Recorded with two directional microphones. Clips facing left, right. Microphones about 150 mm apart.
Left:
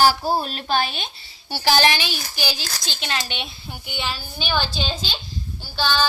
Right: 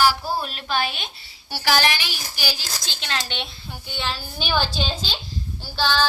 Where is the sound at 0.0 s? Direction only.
30° left (ahead or behind); by 4.2 s 10° left (ahead or behind).